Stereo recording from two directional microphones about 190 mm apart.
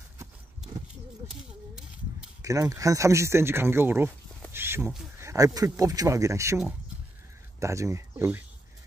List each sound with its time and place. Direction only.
1.3 s a sound: 5° right (ahead or behind)
2.4 s speech: 15° right (ahead or behind)
4.5 s duck: 10° right (ahead or behind)
5.1 s speech: 15° right (ahead or behind)
7.6 s speech: 15° right (ahead or behind)